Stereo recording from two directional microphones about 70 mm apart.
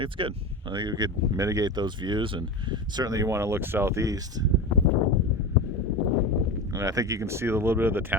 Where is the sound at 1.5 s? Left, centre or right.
Right.